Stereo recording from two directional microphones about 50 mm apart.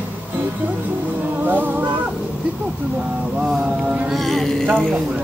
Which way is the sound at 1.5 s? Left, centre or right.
Right.